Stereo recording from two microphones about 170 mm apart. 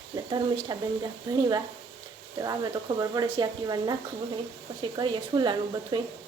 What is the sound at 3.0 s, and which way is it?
Speech, 25° right (ahead or behind).